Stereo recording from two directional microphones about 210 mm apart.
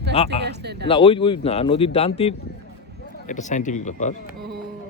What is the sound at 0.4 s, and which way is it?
Speech, 50° right (ahead or behind).